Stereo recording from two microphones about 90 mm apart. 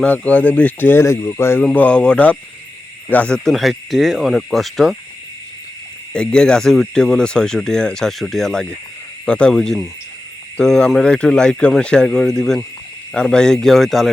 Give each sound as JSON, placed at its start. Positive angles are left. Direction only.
{"t": 0.0, "sound": "speech", "side_deg": 15}
{"t": 1.6, "sound": "speech", "side_deg": 15}
{"t": 3.5, "sound": "speech", "side_deg": 0}
{"t": 6.1, "sound": "speech", "side_deg": 10}